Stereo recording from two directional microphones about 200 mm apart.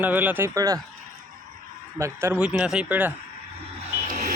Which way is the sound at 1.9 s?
15° right (ahead or behind).